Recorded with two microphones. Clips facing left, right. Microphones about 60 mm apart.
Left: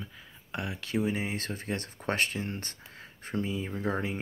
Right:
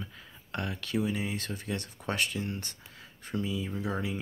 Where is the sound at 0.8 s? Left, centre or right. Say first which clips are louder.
Left 2 dB; left.